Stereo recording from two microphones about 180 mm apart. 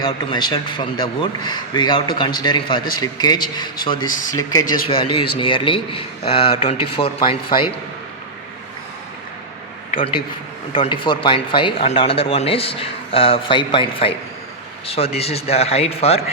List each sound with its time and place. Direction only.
0.0 s a man's voice: 25° left (ahead or behind)
4.0 s speech: 50° left (ahead or behind)
4.7 s a man's voice: 30° left (ahead or behind)
10.7 s a man's voice: 25° left (ahead or behind)